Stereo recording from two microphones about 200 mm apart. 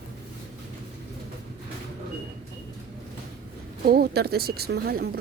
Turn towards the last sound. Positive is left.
turn(degrees=-50)  # may be behind; listen again after turning